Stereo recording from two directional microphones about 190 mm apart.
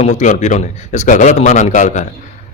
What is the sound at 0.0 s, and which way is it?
A man's voice, 40° left (ahead or behind).